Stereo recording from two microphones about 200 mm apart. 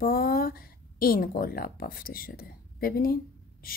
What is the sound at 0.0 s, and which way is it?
A woman's voice, 45° left (ahead or behind).